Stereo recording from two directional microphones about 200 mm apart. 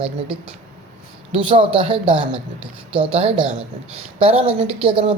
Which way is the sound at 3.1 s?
30° right (ahead or behind).